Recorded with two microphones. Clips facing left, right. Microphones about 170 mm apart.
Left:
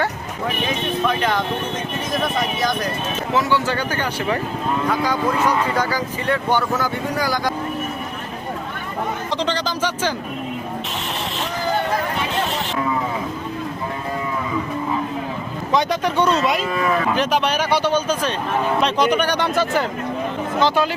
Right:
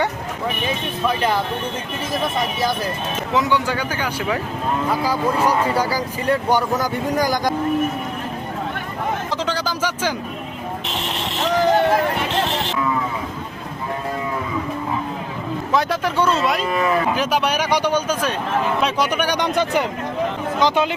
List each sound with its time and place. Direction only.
1.0 s speech: 10° right (ahead or behind)
3.3 s speech: 20° right (ahead or behind)
7.1 s speech: 45° right (ahead or behind)
9.5 s speech: 10° right (ahead or behind)
15.7 s speech: centre (ahead or behind); by 20.9 s 15° right (ahead or behind)